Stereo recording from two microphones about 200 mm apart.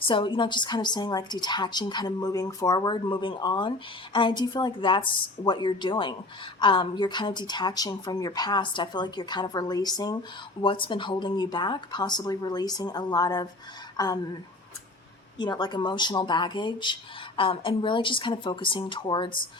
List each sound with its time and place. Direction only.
0.0 s a woman's voice: 25° left (ahead or behind)
15.4 s a woman's voice: 20° left (ahead or behind)